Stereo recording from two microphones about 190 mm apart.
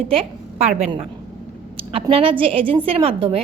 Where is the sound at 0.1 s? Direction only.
30° right (ahead or behind).